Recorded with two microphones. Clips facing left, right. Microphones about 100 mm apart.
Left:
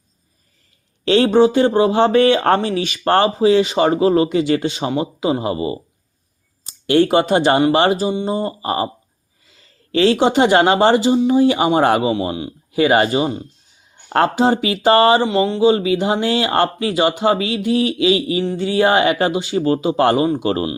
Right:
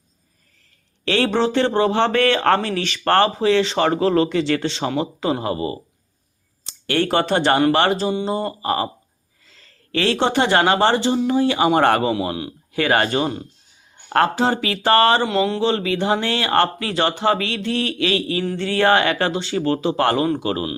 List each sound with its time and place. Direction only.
1.0 s speech: 20° left (ahead or behind)
6.8 s speech: 15° left (ahead or behind)
12.3 s speech: centre (ahead or behind)
12.7 s speech: 15° left (ahead or behind)
14.1 s speech: 20° left (ahead or behind)
15.2 s speech: centre (ahead or behind)
15.6 s speech: 15° left (ahead or behind)
20.4 s speech: 30° left (ahead or behind)